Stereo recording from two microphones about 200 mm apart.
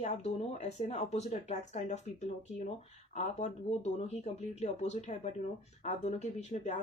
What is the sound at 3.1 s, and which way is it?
Speech, 35° left (ahead or behind).